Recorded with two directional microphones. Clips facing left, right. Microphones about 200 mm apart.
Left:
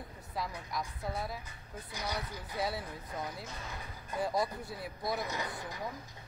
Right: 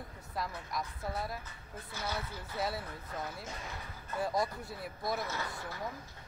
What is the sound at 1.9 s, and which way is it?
Speech, 15° left (ahead or behind).